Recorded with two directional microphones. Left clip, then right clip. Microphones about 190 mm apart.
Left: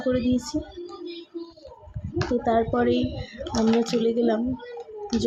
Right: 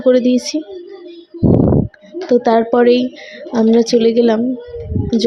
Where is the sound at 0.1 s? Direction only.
45° right (ahead or behind).